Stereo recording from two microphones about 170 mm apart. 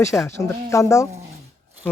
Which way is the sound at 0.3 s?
15° left (ahead or behind).